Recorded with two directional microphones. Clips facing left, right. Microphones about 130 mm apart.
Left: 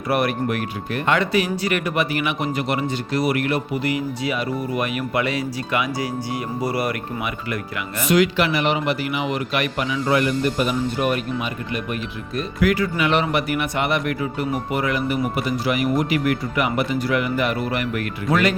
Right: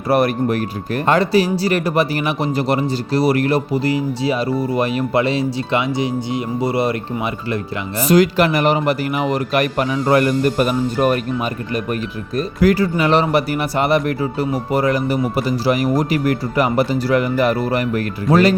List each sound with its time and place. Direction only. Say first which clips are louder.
0.1 s speech: right 5 dB; 35° right (ahead or behind)